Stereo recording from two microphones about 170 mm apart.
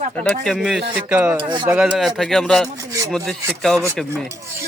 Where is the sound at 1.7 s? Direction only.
5° right (ahead or behind).